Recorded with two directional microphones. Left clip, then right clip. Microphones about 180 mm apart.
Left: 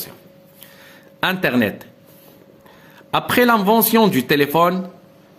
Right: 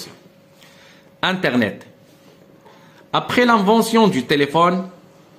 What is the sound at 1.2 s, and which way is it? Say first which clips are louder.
Speech: even; 30° left (ahead or behind).